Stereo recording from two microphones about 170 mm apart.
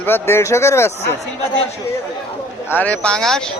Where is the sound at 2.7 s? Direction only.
10° left (ahead or behind).